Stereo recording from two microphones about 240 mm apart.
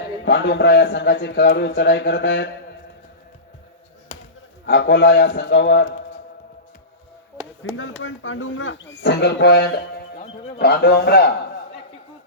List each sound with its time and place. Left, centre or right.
0.3 s speech: left
4.6 s speech: left
7.8 s speech: left